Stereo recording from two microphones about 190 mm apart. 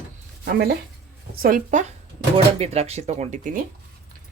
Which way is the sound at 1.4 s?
45° right (ahead or behind).